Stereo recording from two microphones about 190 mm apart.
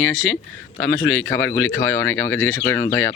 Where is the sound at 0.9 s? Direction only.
15° left (ahead or behind).